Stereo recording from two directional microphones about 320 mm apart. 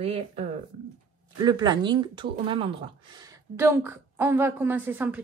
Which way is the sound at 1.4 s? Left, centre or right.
Centre.